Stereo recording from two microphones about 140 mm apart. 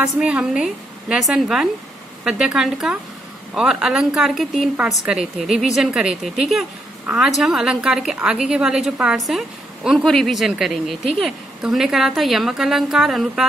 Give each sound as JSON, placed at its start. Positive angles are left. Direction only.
{"t": 0.0, "sound": "a woman's voice", "side_deg": -5}